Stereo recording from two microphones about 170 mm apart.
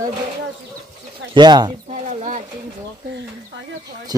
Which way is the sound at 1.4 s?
25° right (ahead or behind).